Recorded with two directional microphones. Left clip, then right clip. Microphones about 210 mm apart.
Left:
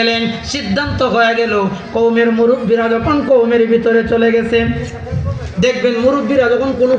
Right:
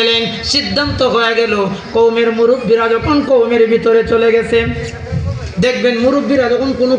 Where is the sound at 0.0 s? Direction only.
60° right (ahead or behind).